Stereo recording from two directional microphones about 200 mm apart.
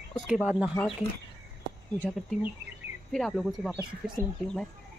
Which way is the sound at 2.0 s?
Centre (ahead or behind).